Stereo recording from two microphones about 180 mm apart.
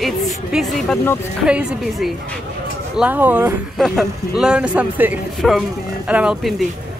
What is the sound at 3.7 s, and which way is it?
Speech, centre (ahead or behind).